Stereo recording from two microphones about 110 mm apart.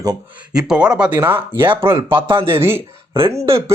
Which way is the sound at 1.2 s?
20° right (ahead or behind).